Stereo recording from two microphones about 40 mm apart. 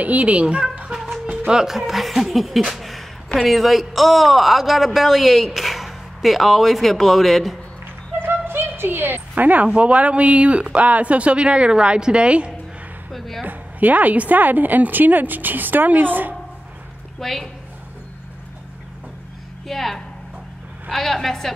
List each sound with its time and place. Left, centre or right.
0.0 s speech: right
0.9 s music: centre
1.5 s speech: centre
1.8 s a man's voice: centre
8.2 s music: right
9.3 s a woman's voice: right
13.4 s a woman's voice: right
17.2 s a man's voice: centre
19.7 s a man's voice: centre